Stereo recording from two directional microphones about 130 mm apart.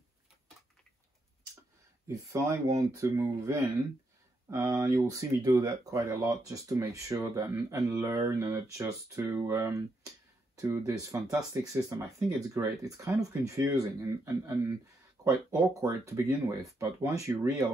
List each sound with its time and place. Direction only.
2.0 s speech: 20° right (ahead or behind)